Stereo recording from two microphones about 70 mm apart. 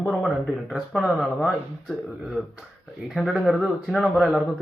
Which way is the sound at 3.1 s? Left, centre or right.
Centre.